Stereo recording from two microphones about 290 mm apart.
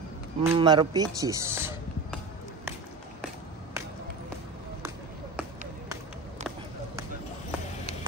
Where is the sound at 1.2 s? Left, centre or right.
Centre.